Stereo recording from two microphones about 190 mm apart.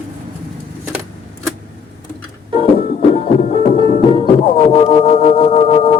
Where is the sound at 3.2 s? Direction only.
35° left (ahead or behind).